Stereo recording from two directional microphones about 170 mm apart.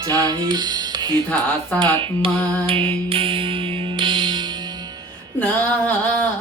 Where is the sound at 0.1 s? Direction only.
25° right (ahead or behind).